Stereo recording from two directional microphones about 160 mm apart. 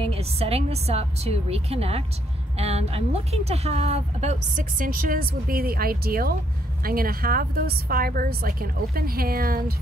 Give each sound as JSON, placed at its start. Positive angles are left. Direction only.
{"t": 0.0, "sound": "a woman's voice", "side_deg": -40}